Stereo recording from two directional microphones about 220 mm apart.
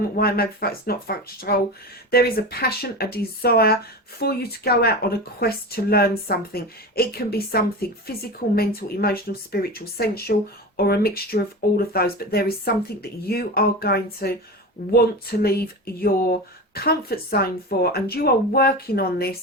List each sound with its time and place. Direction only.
0.2 s a woman's voice: 45° left (ahead or behind)